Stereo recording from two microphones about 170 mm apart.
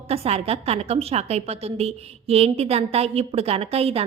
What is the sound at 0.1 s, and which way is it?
A woman's voice, 35° right (ahead or behind).